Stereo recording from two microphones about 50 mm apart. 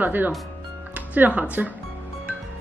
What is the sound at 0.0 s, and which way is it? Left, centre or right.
Speech, right.